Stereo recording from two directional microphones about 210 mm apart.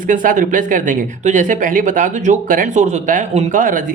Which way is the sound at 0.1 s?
40° right (ahead or behind).